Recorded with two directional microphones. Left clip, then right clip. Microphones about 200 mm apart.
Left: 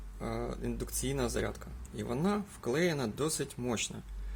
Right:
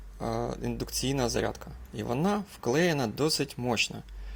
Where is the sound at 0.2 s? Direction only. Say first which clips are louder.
Right 6 dB; 25° right (ahead or behind).